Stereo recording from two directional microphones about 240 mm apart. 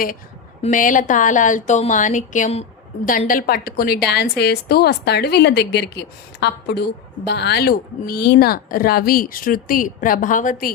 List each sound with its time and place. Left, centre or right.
0.6 s a woman's voice: left